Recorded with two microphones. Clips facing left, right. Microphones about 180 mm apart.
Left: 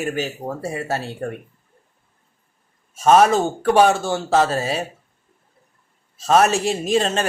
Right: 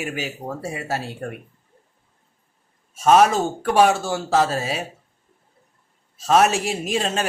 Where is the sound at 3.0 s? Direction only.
Centre (ahead or behind).